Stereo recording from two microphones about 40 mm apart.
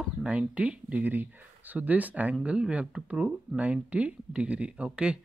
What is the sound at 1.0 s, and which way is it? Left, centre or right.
Speech, right.